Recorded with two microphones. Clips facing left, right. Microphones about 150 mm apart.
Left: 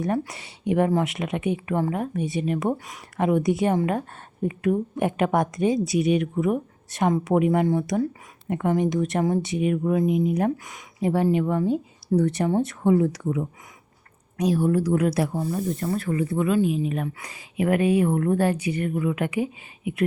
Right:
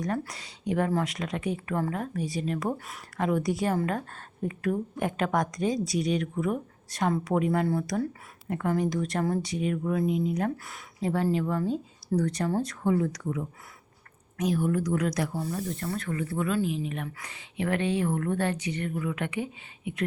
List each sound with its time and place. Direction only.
0.3 s speech: 25° left (ahead or behind)
1.5 s a woman's voice: 15° left (ahead or behind)
5.7 s speech: 5° left (ahead or behind)
7.0 s a woman's voice: 20° left (ahead or behind)
15.3 s a woman's voice: 15° left (ahead or behind)
18.5 s a woman's voice: 10° left (ahead or behind)
18.9 s speech: 20° left (ahead or behind)